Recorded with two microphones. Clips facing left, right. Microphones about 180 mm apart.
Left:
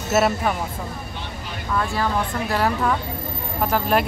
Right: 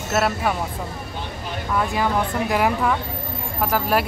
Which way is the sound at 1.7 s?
15° right (ahead or behind).